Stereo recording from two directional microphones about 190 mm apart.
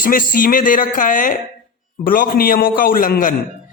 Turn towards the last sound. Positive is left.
turn(degrees=45)  # may be behind; listen again after turning